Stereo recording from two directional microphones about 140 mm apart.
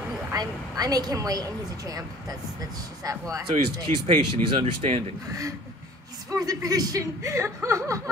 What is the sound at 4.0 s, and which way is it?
Speech, 40° right (ahead or behind).